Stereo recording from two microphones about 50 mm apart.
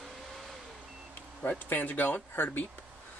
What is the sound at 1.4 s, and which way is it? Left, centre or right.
Speech, left.